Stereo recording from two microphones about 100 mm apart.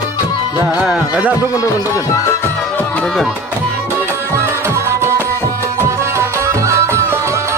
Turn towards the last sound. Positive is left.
turn(degrees=-30)  # may be behind; listen again after turning